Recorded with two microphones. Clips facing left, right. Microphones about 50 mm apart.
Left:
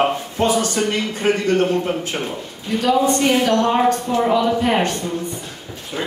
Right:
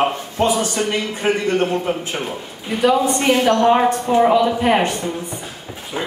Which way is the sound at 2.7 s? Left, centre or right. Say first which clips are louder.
Right 1 dB; centre.